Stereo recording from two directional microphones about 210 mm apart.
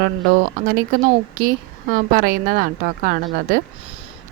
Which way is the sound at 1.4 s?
40° right (ahead or behind).